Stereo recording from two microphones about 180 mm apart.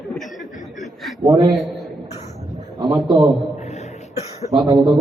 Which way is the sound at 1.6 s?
Centre (ahead or behind).